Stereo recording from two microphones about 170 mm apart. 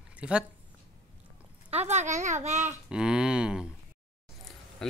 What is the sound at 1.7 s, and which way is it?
A child's voice, 40° right (ahead or behind).